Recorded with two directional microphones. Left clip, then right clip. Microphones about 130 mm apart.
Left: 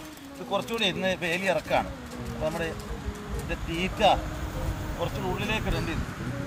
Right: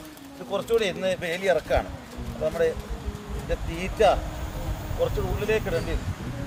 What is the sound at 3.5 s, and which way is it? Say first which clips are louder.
Speech: right 1 dB; 25° right (ahead or behind).